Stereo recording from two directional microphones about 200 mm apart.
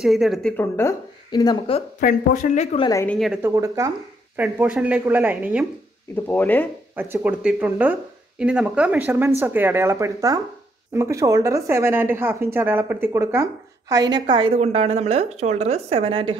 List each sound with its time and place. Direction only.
0.0 s speech: centre (ahead or behind); by 1.8 s 20° left (ahead or behind)
2.0 s speech: 40° left (ahead or behind)
2.9 s speech: 15° left (ahead or behind)
3.2 s a woman's voice: 5° right (ahead or behind)
3.5 s a woman's voice: 15° right (ahead or behind)
6.2 s speech: 10° left (ahead or behind)
7.0 s a woman's voice: 10° right (ahead or behind); by 16.3 s 25° right (ahead or behind)